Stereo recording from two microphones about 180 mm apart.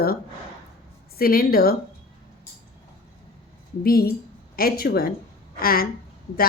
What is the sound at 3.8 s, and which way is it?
A woman's voice, 55° left (ahead or behind).